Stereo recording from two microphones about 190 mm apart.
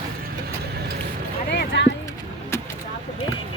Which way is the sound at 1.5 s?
65° left (ahead or behind).